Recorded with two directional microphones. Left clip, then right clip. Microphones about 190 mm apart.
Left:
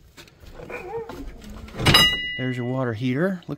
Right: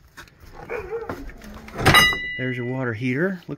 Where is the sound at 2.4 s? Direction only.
15° left (ahead or behind).